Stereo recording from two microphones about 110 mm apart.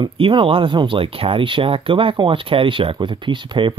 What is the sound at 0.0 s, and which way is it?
Speech, 50° right (ahead or behind).